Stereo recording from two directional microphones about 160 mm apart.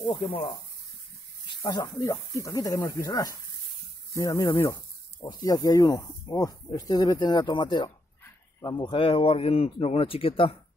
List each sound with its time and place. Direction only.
0.1 s speech: 30° left (ahead or behind)
1.6 s speech: 25° left (ahead or behind)